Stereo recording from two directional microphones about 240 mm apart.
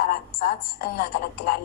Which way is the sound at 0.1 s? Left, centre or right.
Left.